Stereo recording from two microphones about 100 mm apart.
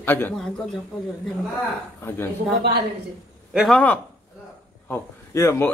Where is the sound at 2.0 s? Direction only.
25° left (ahead or behind).